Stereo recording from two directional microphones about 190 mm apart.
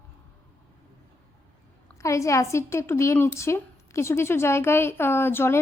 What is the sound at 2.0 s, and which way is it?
A woman's voice, 15° left (ahead or behind).